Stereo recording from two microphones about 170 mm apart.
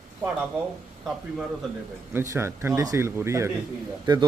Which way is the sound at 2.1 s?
15° right (ahead or behind).